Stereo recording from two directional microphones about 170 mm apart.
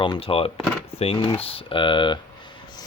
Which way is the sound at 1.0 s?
35° left (ahead or behind).